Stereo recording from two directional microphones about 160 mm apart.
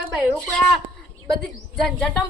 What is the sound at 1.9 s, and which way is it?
Speech, centre (ahead or behind).